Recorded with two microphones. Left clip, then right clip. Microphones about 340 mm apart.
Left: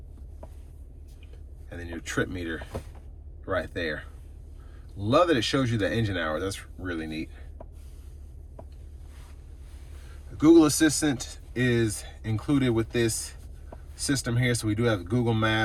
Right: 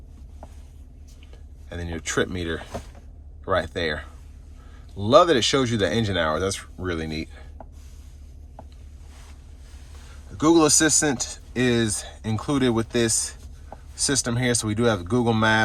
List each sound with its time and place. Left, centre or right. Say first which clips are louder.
1.7 s speech: right 5 dB; centre
5.0 s speech: right 6 dB; centre
10.3 s speech: right 1 dB; centre